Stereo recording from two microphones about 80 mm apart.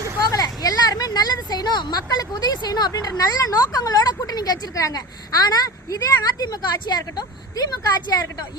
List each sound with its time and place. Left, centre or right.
0.3 s a woman's voice: left